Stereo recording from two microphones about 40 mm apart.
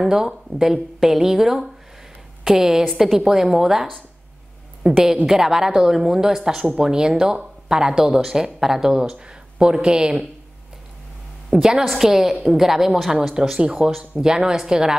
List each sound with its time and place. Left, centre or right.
0.0 s a woman's voice: centre
5.0 s a woman's voice: centre
11.6 s a woman's voice: centre
13.3 s a woman's voice: centre
13.7 s speech: centre
14.2 s a woman's voice: centre